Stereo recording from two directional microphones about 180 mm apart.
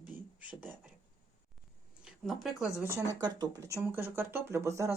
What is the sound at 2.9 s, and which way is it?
Speech, 15° right (ahead or behind).